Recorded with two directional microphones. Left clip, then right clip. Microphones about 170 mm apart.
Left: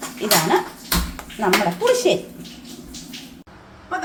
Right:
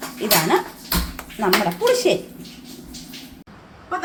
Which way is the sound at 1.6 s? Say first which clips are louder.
Even; 5° right (ahead or behind).